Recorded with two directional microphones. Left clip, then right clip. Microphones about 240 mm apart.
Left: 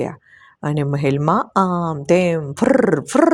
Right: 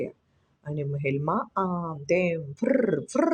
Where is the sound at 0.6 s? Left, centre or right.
Left.